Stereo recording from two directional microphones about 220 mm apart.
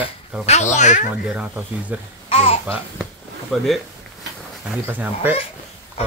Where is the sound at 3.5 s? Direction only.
Centre (ahead or behind).